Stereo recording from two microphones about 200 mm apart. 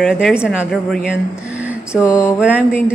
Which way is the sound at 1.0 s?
5° right (ahead or behind).